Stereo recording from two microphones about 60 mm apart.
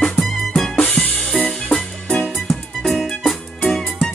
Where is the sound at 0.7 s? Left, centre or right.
Centre.